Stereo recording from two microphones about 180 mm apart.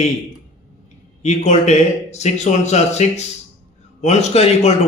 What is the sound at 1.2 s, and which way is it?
Speech, 40° left (ahead or behind).